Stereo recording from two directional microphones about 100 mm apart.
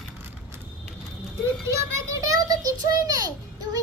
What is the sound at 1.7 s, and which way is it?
A child's voice, 35° right (ahead or behind).